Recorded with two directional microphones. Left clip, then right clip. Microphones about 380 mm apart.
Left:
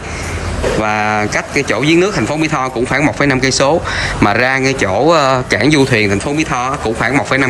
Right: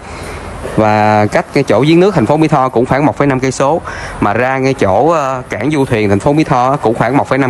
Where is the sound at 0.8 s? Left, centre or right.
Centre.